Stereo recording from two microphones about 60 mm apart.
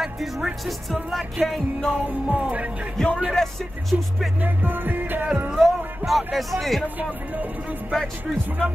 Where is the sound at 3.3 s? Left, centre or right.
Centre.